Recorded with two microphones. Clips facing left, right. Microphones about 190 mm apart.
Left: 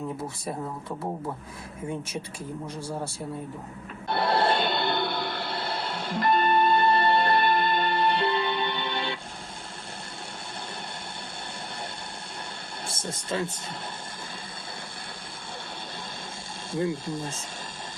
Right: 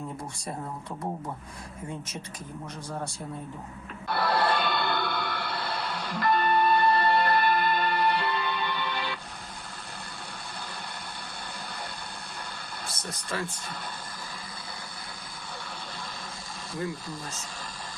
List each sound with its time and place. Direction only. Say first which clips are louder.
4.1 s music: left 2 dB; 25° left (ahead or behind)
12.9 s speech: left 5 dB; 25° left (ahead or behind)
16.7 s speech: left 6 dB; 25° left (ahead or behind)